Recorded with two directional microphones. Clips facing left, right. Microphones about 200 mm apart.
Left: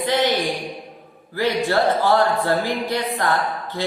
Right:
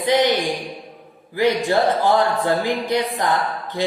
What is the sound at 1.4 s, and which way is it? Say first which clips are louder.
Speech: right 2 dB; 15° right (ahead or behind).